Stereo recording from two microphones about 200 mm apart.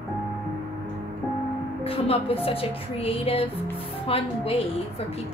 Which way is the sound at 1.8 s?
30° left (ahead or behind).